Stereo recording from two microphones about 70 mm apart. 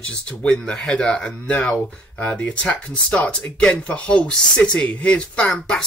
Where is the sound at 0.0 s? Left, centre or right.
Centre.